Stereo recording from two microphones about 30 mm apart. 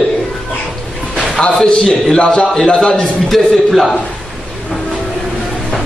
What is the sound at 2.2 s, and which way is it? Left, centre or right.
Speech, left.